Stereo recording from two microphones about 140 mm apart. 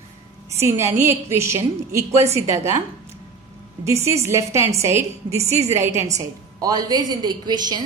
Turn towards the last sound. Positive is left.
turn(degrees=-30)  # may be behind; listen again after turning